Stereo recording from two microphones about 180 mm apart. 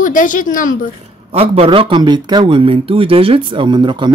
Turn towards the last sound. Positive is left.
turn(degrees=-25)  # may be behind; listen again after turning